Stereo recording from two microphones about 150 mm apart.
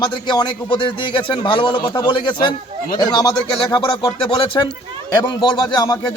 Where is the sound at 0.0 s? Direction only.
30° left (ahead or behind).